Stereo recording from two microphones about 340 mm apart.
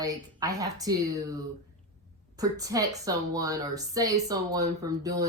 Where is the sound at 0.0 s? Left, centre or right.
Centre.